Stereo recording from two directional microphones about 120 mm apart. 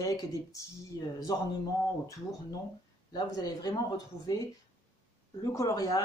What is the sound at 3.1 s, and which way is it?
Speech, 35° left (ahead or behind).